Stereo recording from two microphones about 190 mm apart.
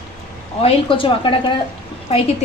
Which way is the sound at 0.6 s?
25° left (ahead or behind).